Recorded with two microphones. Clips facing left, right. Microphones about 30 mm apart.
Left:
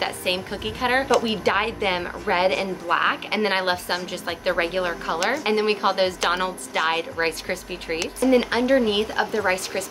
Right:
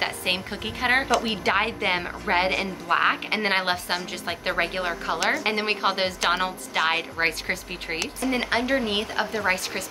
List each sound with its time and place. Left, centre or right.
0.0 s a woman's voice: centre